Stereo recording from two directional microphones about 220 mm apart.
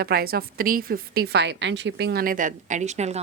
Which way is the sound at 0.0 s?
45° right (ahead or behind).